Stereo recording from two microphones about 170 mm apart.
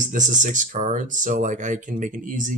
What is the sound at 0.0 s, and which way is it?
Speech, 50° right (ahead or behind).